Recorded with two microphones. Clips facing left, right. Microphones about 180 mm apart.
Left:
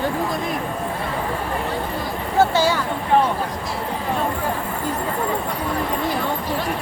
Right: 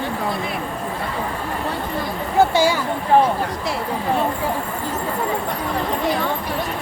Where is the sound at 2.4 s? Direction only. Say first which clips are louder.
Right 1 dB; 15° right (ahead or behind).